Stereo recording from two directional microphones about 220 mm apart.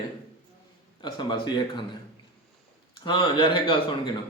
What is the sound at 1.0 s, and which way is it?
Speech, 20° left (ahead or behind).